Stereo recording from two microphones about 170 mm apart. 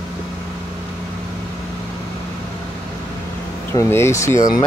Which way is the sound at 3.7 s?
15° left (ahead or behind).